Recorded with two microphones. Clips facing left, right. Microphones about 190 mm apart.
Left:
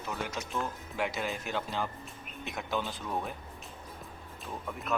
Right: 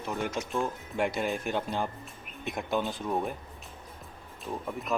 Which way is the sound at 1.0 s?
55° right (ahead or behind).